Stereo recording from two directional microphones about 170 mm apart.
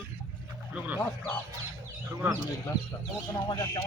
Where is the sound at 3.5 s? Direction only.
20° left (ahead or behind).